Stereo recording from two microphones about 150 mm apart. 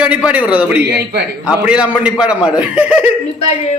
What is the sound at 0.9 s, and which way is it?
Speech, 90° right.